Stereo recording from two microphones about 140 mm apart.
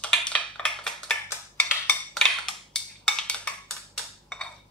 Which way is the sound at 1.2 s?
10° left (ahead or behind).